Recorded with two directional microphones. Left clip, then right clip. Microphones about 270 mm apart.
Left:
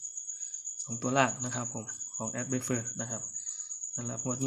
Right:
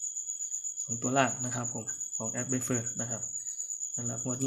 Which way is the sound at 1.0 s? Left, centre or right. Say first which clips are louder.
Even; centre.